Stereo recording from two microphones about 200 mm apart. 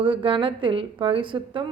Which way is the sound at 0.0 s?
25° right (ahead or behind).